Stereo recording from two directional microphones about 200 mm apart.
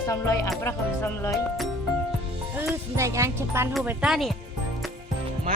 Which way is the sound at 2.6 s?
10° right (ahead or behind).